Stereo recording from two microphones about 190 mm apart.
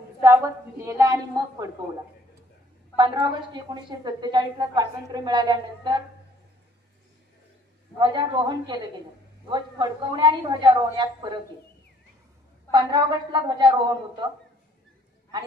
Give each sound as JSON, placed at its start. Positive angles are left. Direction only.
{"t": 0.2, "sound": "a woman's voice", "side_deg": -15}
{"t": 3.0, "sound": "a woman's voice", "side_deg": -25}
{"t": 8.0, "sound": "a woman's voice", "side_deg": -20}
{"t": 12.7, "sound": "a woman's voice", "side_deg": -25}